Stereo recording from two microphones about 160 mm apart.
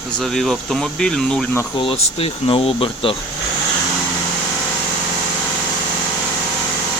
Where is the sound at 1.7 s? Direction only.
35° left (ahead or behind).